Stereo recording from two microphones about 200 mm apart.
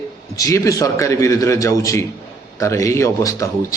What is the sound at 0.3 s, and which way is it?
A man's voice, 15° left (ahead or behind).